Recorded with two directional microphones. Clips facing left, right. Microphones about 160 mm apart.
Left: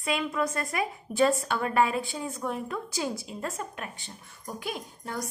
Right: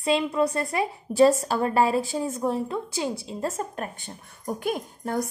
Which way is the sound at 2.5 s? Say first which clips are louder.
Right 5 dB; 25° right (ahead or behind).